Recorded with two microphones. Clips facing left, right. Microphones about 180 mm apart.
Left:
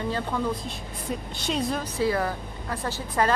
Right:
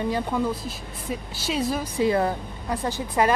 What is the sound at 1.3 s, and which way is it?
Speech, 5° right (ahead or behind).